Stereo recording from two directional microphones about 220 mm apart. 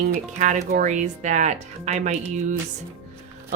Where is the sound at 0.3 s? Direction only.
35° right (ahead or behind).